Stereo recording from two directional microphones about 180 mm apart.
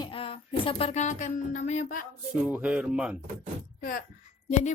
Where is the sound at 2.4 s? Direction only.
5° right (ahead or behind).